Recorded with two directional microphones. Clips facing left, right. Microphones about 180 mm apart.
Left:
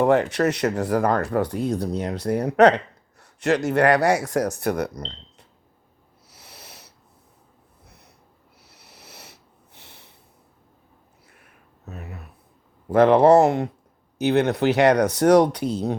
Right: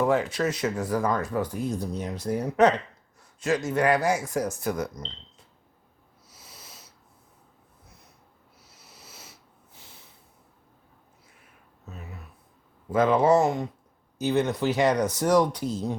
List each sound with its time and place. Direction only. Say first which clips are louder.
0.0 s speech: left 5 dB; 70° left (ahead or behind)
6.2 s owl: left 4 dB; 70° left (ahead or behind)
7.9 s a sound: left 3 dB; 70° left (ahead or behind)
8.6 s sniff: left 3 dB; 65° left (ahead or behind)
11.9 s a sound: left 5 dB; 65° left (ahead or behind)
12.9 s speech: left 6 dB; 70° left (ahead or behind)